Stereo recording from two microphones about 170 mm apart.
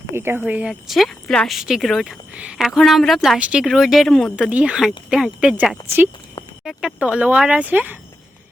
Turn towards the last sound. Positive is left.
turn(degrees=-10)  # may be behind; listen again after turning